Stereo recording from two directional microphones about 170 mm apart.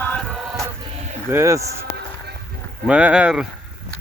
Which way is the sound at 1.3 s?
15° right (ahead or behind).